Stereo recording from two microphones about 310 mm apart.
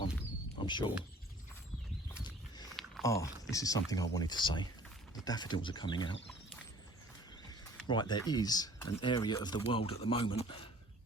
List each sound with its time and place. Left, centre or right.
0.6 s speech: centre
2.1 s a sound: centre
3.5 s speech: centre
7.9 s speech: centre